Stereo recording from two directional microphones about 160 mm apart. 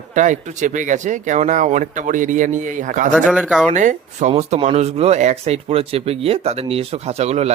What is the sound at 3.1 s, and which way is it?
Speech, 5° right (ahead or behind).